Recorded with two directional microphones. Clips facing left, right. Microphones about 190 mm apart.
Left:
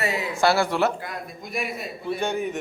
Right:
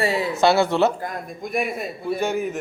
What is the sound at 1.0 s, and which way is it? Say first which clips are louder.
Speech: right 4 dB; 50° right (ahead or behind).